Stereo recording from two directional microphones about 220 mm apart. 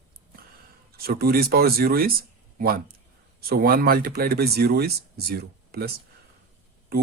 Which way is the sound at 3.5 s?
45° right (ahead or behind).